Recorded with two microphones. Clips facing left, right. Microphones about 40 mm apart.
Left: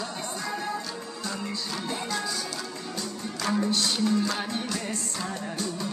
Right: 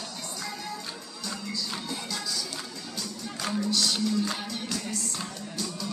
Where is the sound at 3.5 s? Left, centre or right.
Left.